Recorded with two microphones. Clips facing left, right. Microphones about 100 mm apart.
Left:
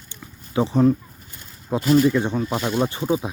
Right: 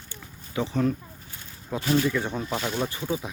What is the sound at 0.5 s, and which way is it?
Speech, 30° left (ahead or behind).